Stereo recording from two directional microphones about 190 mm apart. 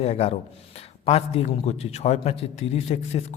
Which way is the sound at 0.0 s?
35° left (ahead or behind).